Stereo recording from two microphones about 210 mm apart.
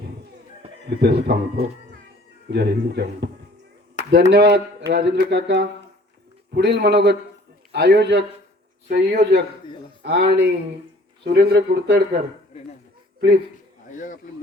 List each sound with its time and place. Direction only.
0.9 s a man's voice: 55° right (ahead or behind)
2.5 s a man's voice: 55° right (ahead or behind)
12.5 s speech: 30° left (ahead or behind)
13.9 s speech: 35° left (ahead or behind)